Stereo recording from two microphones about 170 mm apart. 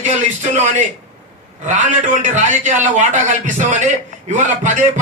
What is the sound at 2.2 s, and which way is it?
Speech, 45° right (ahead or behind).